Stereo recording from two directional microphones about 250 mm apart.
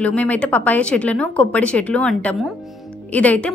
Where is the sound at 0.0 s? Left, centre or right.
Centre.